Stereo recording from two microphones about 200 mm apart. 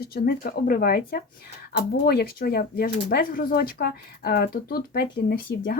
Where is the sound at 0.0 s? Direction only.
50° left (ahead or behind).